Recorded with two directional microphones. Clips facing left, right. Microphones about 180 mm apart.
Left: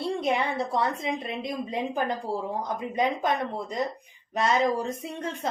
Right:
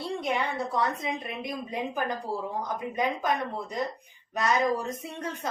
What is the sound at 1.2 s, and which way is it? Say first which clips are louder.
Speech: left 3 dB; 25° left (ahead or behind).